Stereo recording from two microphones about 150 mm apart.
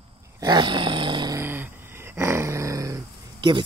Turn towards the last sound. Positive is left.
turn(degrees=-25)  # may be behind; listen again after turning